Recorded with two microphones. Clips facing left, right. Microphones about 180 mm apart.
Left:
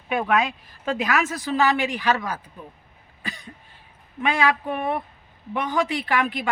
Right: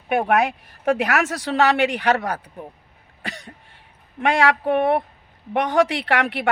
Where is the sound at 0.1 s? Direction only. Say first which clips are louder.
Right 3 dB; 65° right (ahead or behind).